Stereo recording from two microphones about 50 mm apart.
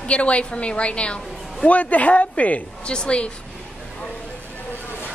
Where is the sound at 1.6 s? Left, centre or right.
Left.